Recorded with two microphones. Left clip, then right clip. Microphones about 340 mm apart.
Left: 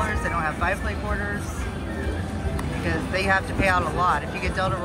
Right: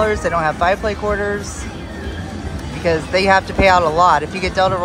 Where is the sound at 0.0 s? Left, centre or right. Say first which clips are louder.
Right 9 dB; centre.